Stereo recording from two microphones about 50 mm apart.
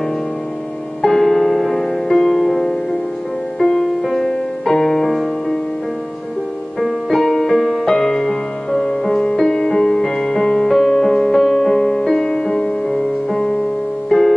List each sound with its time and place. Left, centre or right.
1.0 s music: centre
6.8 s music: centre